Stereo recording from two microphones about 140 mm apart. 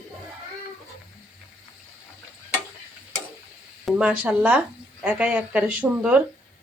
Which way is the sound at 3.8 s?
10° right (ahead or behind).